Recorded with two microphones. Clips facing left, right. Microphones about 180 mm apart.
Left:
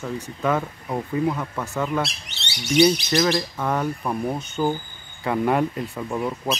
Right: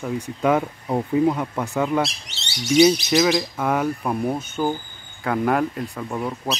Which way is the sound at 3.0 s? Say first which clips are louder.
Right 2 dB; 10° right (ahead or behind).